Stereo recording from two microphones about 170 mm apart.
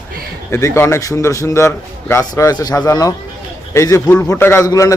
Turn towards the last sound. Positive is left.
turn(degrees=20)  # may be behind; listen again after turning